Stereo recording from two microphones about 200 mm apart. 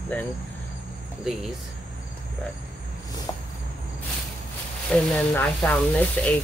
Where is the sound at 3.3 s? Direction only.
20° left (ahead or behind).